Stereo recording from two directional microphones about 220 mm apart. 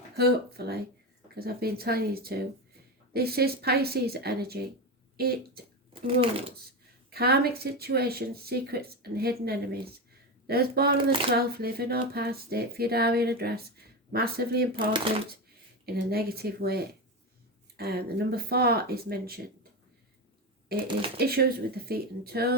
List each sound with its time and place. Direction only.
0.2 s speech: 45° right (ahead or behind)
5.9 s speech: 25° right (ahead or behind)
7.1 s speech: 45° right (ahead or behind)
16.0 s speech: 45° right (ahead or behind)
21.2 s speech: 45° right (ahead or behind)